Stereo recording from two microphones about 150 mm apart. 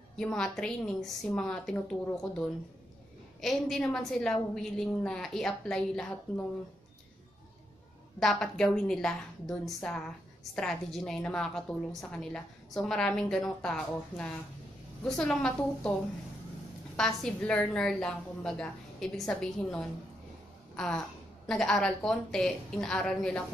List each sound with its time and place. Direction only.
0.1 s a woman's voice: 5° left (ahead or behind)
3.3 s a woman's voice: centre (ahead or behind)
8.2 s a woman's voice: 5° left (ahead or behind)
16.9 s a woman's voice: 5° left (ahead or behind)